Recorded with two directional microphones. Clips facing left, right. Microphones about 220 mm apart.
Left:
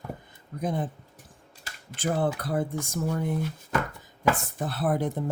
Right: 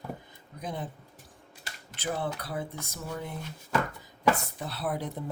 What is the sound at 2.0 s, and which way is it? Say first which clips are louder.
Speech: left 6 dB; 50° left (ahead or behind).